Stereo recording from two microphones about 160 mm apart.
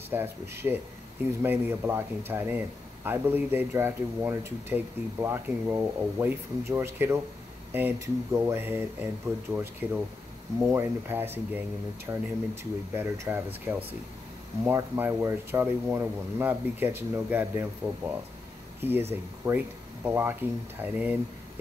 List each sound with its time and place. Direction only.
0.1 s speech: 15° right (ahead or behind)
18.8 s speech: 15° right (ahead or behind)